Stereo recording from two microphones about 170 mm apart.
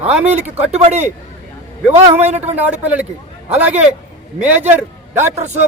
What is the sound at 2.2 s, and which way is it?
Speech, 40° right (ahead or behind).